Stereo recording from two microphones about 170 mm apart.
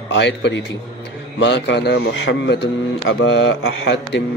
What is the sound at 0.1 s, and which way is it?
A man's voice, 90° left.